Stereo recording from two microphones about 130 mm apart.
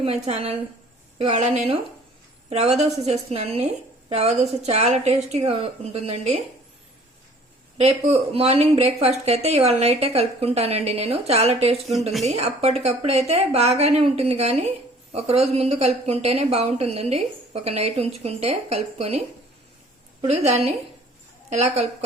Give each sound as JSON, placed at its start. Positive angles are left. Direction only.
{"t": 0.0, "sound": "a woman's voice", "side_deg": -50}
{"t": 7.8, "sound": "a woman's voice", "side_deg": -55}
{"t": 20.2, "sound": "a woman's voice", "side_deg": -55}